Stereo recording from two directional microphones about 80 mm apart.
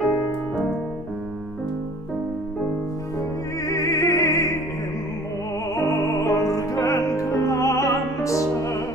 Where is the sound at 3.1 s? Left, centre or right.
Left.